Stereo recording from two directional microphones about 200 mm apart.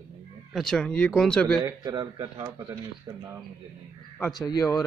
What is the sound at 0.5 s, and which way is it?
Speech, centre (ahead or behind).